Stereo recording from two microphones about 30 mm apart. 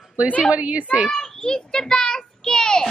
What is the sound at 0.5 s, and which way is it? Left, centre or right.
Speech, right.